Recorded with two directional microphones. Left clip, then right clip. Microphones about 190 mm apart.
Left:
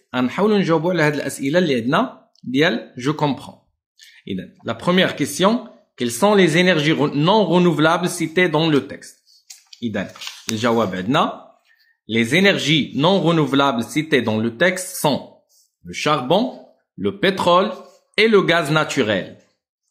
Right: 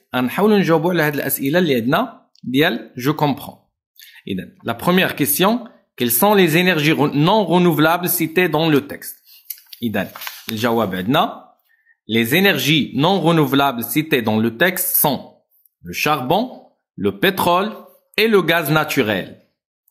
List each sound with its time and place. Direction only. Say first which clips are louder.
0.1 s speech: right 2 dB; 25° right (ahead or behind)